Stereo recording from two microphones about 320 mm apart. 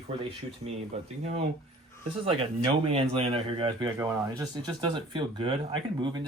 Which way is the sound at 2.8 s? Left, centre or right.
Centre.